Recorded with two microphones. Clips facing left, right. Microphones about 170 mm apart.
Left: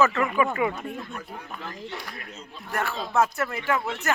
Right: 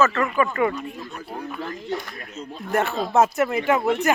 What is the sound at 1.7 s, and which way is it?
Speech, 30° left (ahead or behind).